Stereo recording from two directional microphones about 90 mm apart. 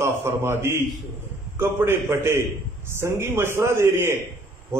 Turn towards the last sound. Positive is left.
turn(degrees=-30)  # may be behind; listen again after turning